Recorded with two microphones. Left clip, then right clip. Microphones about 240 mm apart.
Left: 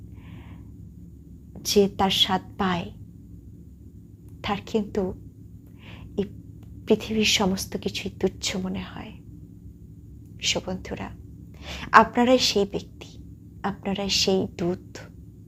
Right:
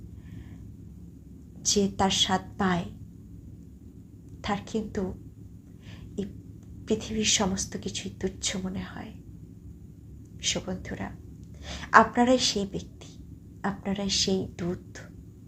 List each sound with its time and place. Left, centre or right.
1.6 s a woman's voice: left
4.4 s a woman's voice: left
6.2 s a woman's voice: left
10.4 s a woman's voice: left